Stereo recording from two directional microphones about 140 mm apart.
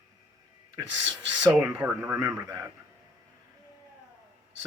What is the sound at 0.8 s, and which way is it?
Speech, 30° right (ahead or behind).